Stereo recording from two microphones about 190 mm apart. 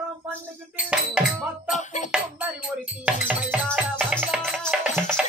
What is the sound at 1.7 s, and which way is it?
Music, 40° left (ahead or behind).